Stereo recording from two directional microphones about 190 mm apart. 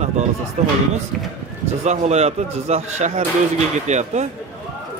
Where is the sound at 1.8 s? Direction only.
35° right (ahead or behind).